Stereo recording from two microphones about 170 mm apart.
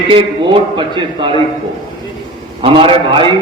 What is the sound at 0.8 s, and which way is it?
Speech, 25° right (ahead or behind).